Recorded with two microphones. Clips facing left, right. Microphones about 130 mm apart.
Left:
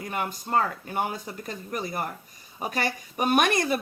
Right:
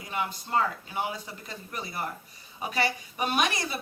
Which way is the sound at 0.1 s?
50° left (ahead or behind).